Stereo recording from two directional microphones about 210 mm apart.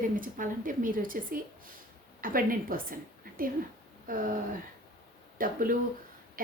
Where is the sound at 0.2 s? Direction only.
40° right (ahead or behind).